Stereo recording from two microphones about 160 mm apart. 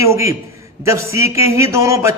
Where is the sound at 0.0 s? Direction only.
20° right (ahead or behind).